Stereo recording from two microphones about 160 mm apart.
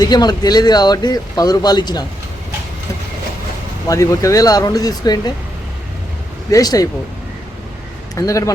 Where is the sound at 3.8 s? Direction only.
20° left (ahead or behind).